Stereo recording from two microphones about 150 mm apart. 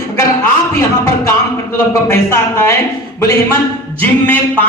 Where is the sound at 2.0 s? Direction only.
15° left (ahead or behind).